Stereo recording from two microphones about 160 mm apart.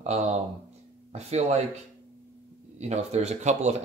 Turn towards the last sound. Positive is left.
turn(degrees=-45)  # may be behind; listen again after turning